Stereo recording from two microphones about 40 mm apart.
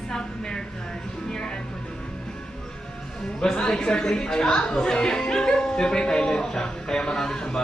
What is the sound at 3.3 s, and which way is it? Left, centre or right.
Speech, centre.